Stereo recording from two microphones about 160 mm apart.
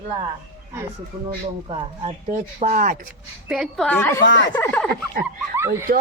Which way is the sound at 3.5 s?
Centre (ahead or behind).